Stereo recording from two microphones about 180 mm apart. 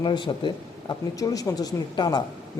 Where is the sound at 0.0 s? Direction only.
25° left (ahead or behind).